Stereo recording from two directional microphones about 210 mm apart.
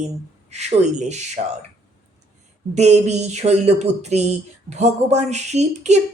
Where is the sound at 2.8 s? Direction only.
30° right (ahead or behind).